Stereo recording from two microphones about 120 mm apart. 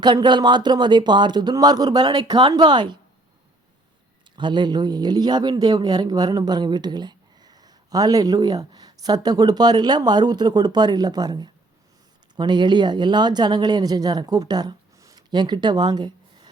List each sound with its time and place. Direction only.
0.0 s speech: 40° right (ahead or behind)
4.4 s speech: 40° right (ahead or behind)